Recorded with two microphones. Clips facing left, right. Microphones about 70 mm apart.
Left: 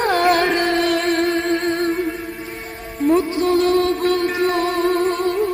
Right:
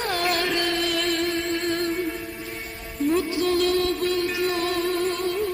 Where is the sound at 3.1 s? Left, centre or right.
Left.